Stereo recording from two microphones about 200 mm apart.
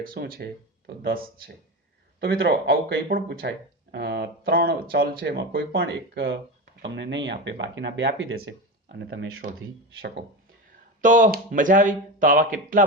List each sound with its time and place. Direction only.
0.0 s speech: 45° right (ahead or behind)
2.2 s speech: 60° right (ahead or behind)
8.4 s a sound: 65° right (ahead or behind)
9.4 s speech: 40° right (ahead or behind)
11.0 s speech: 40° right (ahead or behind)